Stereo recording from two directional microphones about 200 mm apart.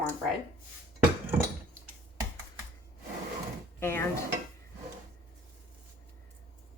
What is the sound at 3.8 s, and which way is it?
Stir, 10° left (ahead or behind).